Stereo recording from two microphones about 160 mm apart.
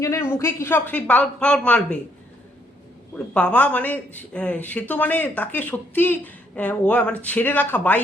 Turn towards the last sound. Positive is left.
turn(degrees=10)  # may be behind; listen again after turning